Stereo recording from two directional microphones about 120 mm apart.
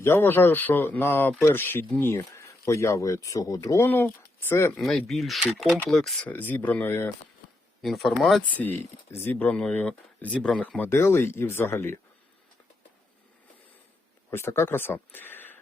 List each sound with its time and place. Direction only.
0.0 s speech: 20° left (ahead or behind)
4.8 s speech: centre (ahead or behind)
6.3 s speech: 15° left (ahead or behind)
7.8 s speech: centre (ahead or behind)
8.4 s speech: 15° left (ahead or behind)
14.3 s speech: 20° left (ahead or behind)